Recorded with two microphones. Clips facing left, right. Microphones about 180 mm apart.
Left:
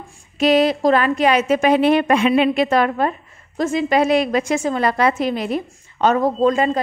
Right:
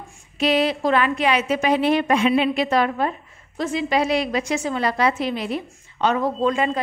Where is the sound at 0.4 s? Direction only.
45° left (ahead or behind).